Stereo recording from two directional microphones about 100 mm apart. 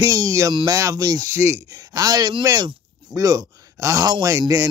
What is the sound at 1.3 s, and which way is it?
Speech, 25° right (ahead or behind).